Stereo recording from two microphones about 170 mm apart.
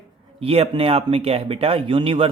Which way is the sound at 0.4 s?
35° right (ahead or behind).